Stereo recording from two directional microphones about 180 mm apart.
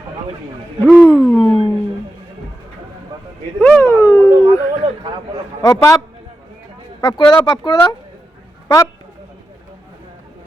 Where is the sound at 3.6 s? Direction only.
10° left (ahead or behind).